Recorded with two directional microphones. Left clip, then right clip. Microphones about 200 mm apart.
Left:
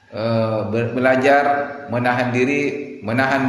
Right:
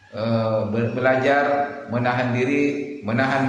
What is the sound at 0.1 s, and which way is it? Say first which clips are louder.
A man's voice: left 2 dB; 40° left (ahead or behind).